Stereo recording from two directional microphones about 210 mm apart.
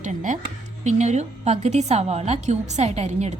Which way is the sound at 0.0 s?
35° right (ahead or behind).